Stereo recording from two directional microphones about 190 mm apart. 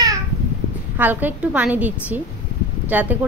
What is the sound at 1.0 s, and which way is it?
Speech, 10° right (ahead or behind).